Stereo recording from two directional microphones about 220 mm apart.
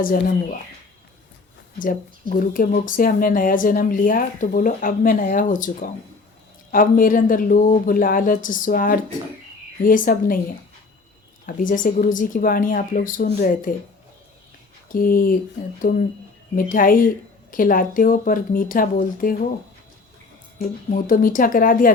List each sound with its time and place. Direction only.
0.0 s speech: 40° left (ahead or behind)
2.4 s speech: 40° left (ahead or behind)
11.4 s speech: 35° left (ahead or behind)
14.9 s speech: 40° left (ahead or behind)
20.6 s speech: 40° left (ahead or behind)